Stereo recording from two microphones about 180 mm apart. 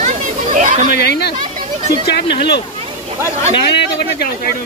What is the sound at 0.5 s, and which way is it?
Speech, 45° right (ahead or behind).